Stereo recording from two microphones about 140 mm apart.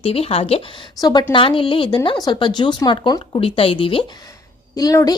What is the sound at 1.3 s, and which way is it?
Speech, 35° left (ahead or behind).